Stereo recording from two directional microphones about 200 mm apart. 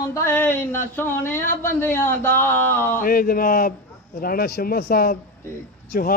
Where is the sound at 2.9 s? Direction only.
45° left (ahead or behind).